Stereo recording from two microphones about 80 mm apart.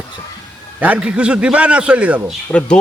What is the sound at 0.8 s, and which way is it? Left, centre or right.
A man's voice, centre.